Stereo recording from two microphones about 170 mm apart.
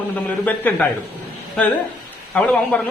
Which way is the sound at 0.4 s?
10° left (ahead or behind).